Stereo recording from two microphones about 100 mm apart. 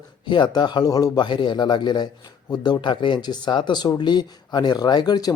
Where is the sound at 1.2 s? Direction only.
55° left (ahead or behind).